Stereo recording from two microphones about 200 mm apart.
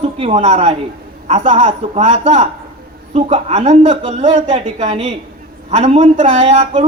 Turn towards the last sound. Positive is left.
turn(degrees=-30)  # may be behind; listen again after turning